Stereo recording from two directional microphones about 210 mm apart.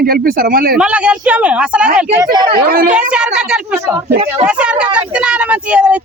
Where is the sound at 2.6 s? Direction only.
45° right (ahead or behind).